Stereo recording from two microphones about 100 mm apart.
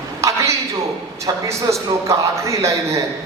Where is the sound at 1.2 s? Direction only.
30° right (ahead or behind).